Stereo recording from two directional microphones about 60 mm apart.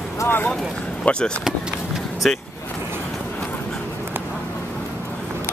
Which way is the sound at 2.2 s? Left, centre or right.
Centre.